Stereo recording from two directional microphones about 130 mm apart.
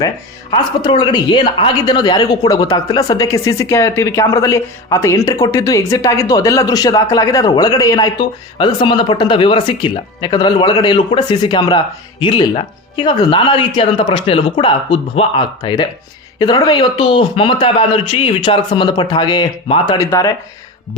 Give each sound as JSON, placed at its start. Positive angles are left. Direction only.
{"t": 0.5, "sound": "a man's voice", "side_deg": 35}
{"t": 20.0, "sound": "a man's voice", "side_deg": 25}